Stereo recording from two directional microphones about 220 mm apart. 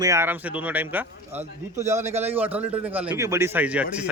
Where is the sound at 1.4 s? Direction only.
30° right (ahead or behind).